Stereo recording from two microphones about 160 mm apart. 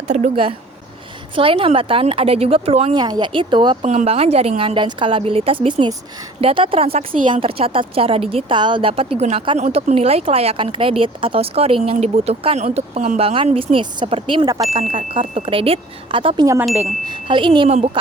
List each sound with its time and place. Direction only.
0.1 s speech: 40° right (ahead or behind)
3.0 s speech: 25° right (ahead or behind)
3.8 s speech: 45° right (ahead or behind)